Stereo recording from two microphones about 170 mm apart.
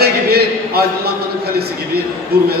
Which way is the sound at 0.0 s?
65° right (ahead or behind).